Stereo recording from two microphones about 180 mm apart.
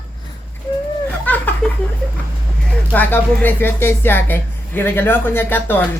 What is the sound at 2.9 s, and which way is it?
Speech, 10° left (ahead or behind).